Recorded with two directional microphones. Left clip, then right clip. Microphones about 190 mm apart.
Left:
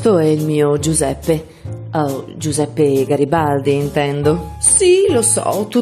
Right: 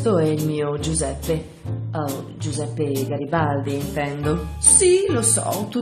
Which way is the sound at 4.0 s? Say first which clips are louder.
Left 4 dB; 55° left (ahead or behind).